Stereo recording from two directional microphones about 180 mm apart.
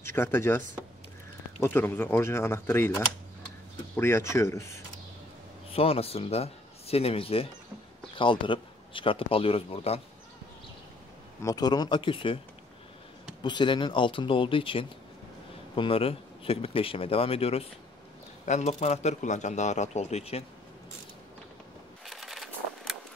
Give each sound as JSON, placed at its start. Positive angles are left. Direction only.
{"t": 0.0, "sound": "speech", "side_deg": 15}
{"t": 5.7, "sound": "speech", "side_deg": 35}
{"t": 11.4, "sound": "speech", "side_deg": 20}
{"t": 13.4, "sound": "a man's voice", "side_deg": 25}
{"t": 22.0, "sound": "a sound", "side_deg": 0}